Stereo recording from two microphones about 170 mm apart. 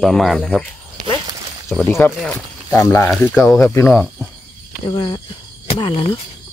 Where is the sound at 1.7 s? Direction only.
10° left (ahead or behind).